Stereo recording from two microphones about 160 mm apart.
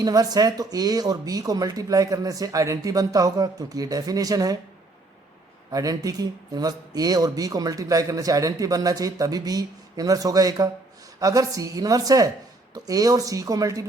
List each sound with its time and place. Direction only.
0.0 s speech: 25° right (ahead or behind)
5.7 s speech: 25° right (ahead or behind)